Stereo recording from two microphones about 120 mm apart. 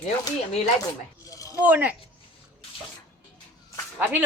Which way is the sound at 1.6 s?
15° right (ahead or behind).